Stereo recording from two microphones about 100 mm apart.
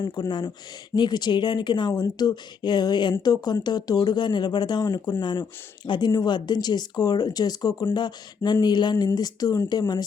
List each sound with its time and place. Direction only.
0.0 s speech: 50° left (ahead or behind)